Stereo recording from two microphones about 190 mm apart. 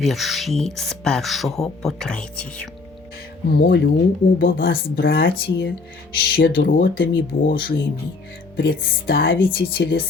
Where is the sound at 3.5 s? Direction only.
55° left (ahead or behind).